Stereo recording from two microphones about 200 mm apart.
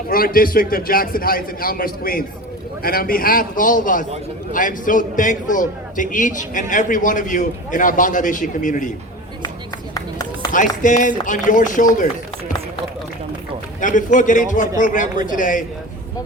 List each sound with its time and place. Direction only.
0.1 s a man's voice: 45° left (ahead or behind)
9.9 s run: 20° left (ahead or behind)
10.5 s a man's voice: 40° left (ahead or behind)
13.8 s a man's voice: 40° left (ahead or behind)